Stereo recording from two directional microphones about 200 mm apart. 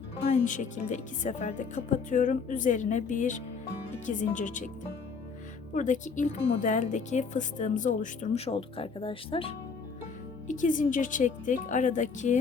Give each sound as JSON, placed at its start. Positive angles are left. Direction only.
{"t": 0.3, "sound": "speech", "side_deg": 35}
{"t": 5.7, "sound": "speech", "side_deg": 40}
{"t": 10.4, "sound": "speech", "side_deg": 40}